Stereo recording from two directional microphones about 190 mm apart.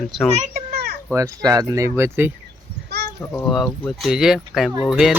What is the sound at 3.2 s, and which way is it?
Speech, 15° left (ahead or behind).